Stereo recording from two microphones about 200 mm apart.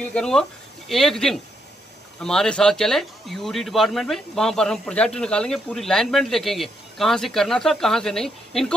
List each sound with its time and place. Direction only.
0.0 s speech: 5° left (ahead or behind)